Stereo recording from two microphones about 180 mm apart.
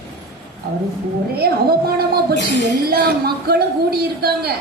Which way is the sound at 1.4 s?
60° right (ahead or behind).